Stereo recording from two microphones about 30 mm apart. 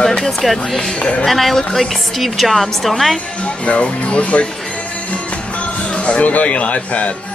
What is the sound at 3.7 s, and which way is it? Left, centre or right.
Speech, left.